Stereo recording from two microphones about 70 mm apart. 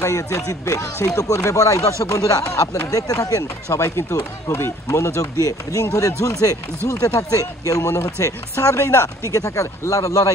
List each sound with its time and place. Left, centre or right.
0.0 s speech: left
5.5 s speech: left